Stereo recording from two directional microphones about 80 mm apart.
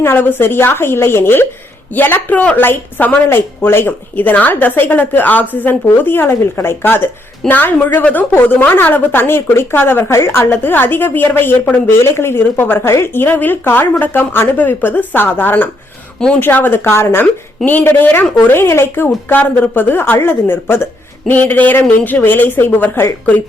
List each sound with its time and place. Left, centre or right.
0.0 s a woman's voice: left